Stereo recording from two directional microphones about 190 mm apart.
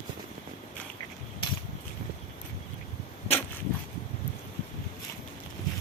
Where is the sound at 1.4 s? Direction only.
25° left (ahead or behind).